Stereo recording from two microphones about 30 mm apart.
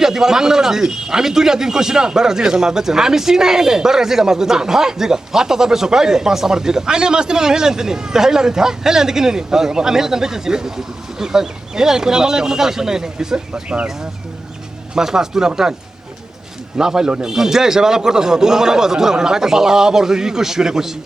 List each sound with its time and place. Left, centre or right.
0.0 s speech: centre
13.5 s speech: right
14.9 s speech: centre
16.8 s speech: right